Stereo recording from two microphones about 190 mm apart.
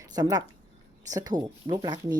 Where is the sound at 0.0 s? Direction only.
20° right (ahead or behind).